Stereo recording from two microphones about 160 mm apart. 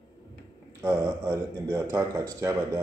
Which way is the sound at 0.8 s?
20° right (ahead or behind).